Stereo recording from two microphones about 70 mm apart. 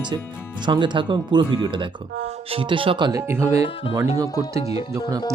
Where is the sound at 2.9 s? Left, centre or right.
Right.